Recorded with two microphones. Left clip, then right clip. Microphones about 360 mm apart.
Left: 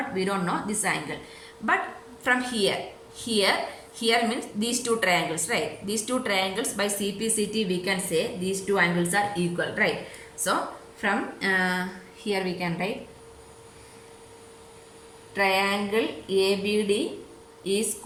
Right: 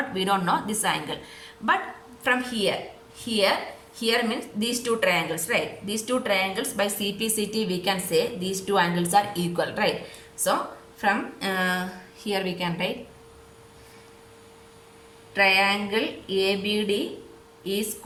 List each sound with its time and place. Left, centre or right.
0.2 s speech: centre
2.2 s a woman's voice: centre
15.4 s a woman's voice: centre